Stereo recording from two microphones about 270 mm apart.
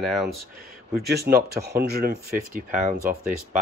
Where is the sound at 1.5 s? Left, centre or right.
Right.